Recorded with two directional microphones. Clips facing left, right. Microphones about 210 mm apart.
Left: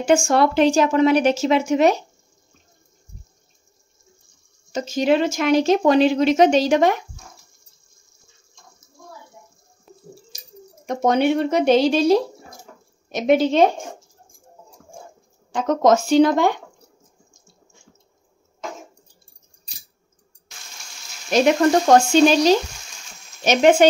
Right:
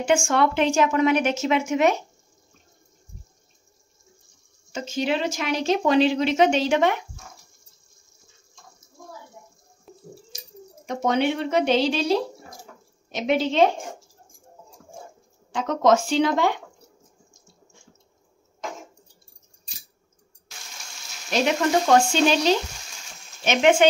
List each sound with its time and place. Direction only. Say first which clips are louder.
0.0 s speech: left 4 dB; 40° left (ahead or behind)
4.7 s speech: left 7 dB; 40° left (ahead or behind)
9.9 s a sound: even; centre (ahead or behind)
10.9 s speech: left 4 dB; 45° left (ahead or behind)
15.5 s speech: left 3 dB; 45° left (ahead or behind)
21.8 s speech: left 5 dB; 40° left (ahead or behind)